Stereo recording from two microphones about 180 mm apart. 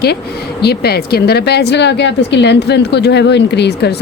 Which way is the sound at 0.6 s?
65° left (ahead or behind).